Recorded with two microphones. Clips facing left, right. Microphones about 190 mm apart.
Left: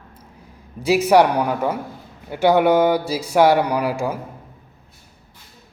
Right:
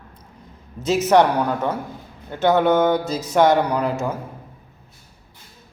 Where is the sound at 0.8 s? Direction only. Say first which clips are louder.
Left 1 dB; 10° left (ahead or behind).